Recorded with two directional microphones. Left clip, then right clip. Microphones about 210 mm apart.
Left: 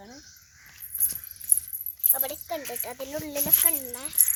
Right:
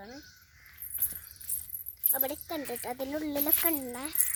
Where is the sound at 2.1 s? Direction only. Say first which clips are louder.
Left 2 dB; 30° right (ahead or behind).